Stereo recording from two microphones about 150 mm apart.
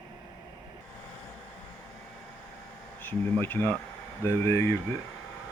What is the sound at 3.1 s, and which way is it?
Speech, 10° left (ahead or behind).